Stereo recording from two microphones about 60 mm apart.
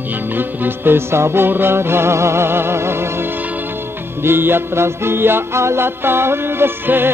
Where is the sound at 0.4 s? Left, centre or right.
Right.